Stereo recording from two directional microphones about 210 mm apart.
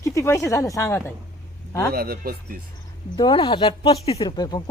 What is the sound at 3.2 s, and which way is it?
A woman's voice, 25° left (ahead or behind).